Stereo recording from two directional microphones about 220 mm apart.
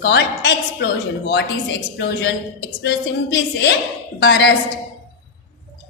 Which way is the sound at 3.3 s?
50° left (ahead or behind).